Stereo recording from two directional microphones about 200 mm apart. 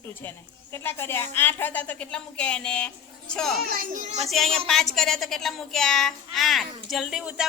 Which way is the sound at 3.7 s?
40° right (ahead or behind).